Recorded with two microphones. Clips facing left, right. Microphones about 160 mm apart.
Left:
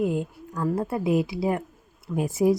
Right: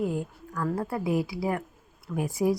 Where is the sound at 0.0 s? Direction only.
20° left (ahead or behind).